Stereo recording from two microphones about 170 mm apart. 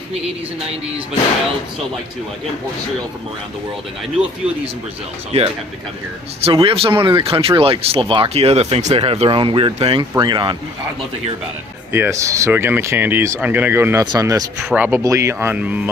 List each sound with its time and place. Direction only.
5.3 s speech: 40° right (ahead or behind)
11.9 s speech: 15° right (ahead or behind)
14.6 s speech: centre (ahead or behind)
14.8 s speech: 15° right (ahead or behind)